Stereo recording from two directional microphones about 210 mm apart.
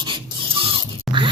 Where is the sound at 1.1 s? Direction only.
Centre (ahead or behind).